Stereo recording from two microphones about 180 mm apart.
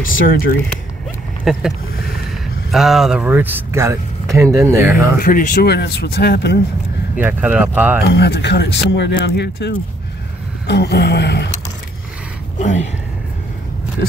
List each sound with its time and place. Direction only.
0.2 s speech: 50° left (ahead or behind)
1.4 s speech: centre (ahead or behind)
2.7 s speech: centre (ahead or behind)
5.2 s speech: 50° left (ahead or behind); by 6.6 s 70° left (ahead or behind)
7.2 s speech: 10° right (ahead or behind)
8.0 s speech: 70° left (ahead or behind)
12.5 s speech: 40° left (ahead or behind)